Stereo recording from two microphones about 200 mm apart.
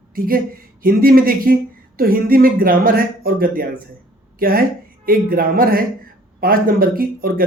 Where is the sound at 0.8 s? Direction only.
45° right (ahead or behind).